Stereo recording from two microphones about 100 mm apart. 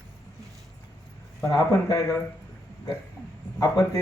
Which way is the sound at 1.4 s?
30° left (ahead or behind).